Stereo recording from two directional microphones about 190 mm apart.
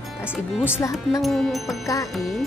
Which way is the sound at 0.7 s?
15° left (ahead or behind).